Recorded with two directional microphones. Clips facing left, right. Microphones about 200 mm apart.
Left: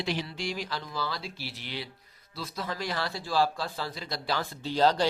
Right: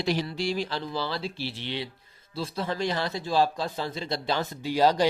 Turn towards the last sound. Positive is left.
turn(degrees=-10)  # may be behind; listen again after turning